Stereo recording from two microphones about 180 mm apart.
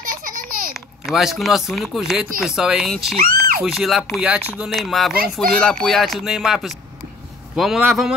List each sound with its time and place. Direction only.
0.0 s a sound: 50° right (ahead or behind)
1.1 s speech: centre (ahead or behind)
3.2 s speech: 55° right (ahead or behind)
3.6 s speech: centre (ahead or behind)
5.1 s speech: 55° right (ahead or behind)
5.6 s speech: 5° left (ahead or behind)